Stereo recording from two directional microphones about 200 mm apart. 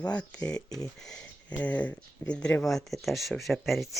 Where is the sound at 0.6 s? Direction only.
20° left (ahead or behind).